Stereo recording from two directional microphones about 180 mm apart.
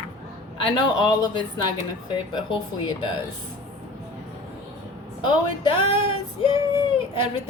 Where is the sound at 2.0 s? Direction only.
25° left (ahead or behind).